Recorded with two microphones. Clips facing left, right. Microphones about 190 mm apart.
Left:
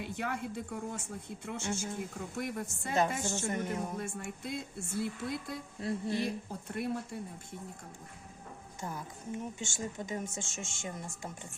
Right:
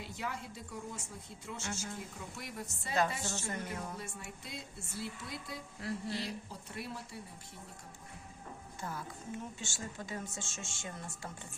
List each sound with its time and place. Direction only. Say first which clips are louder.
0.0 s speech: left 5 dB; 60° left (ahead or behind)
3.5 s speech: left 6 dB; 20° left (ahead or behind)
3.9 s speech: left 7 dB; 50° left (ahead or behind)
5.8 s speech: left 5 dB; 20° left (ahead or behind)
6.2 s speech: left 6 dB; 55° left (ahead or behind)
8.8 s a woman's voice: left 2 dB; 15° left (ahead or behind)